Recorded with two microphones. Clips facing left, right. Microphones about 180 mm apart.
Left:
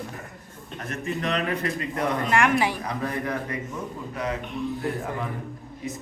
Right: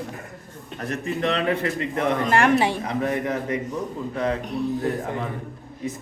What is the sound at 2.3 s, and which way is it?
A man's voice, 35° right (ahead or behind).